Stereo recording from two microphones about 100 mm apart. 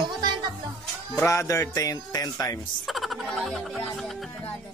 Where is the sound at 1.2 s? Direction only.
30° left (ahead or behind).